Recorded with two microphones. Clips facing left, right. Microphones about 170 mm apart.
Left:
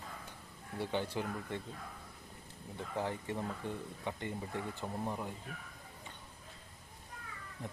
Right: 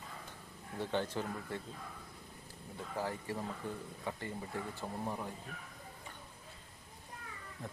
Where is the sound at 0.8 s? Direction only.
10° left (ahead or behind).